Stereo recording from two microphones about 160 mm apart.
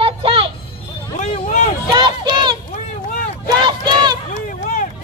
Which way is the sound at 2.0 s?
30° right (ahead or behind).